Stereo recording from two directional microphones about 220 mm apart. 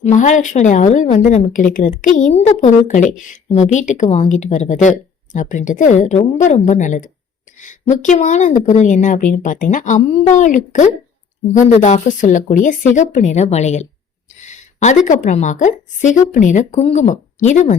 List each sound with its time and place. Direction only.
0.0 s a woman's voice: 35° left (ahead or behind)